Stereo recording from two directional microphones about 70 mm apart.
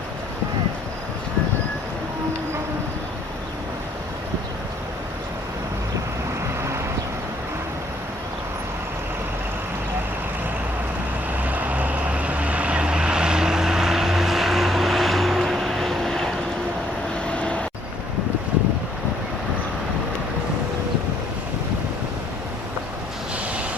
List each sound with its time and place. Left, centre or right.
6.6 s vehicle: right
11.4 s vehicle: right; by 16.3 s centre
17.3 s vehicle: centre